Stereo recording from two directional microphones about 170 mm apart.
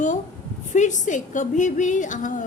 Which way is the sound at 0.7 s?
45° left (ahead or behind).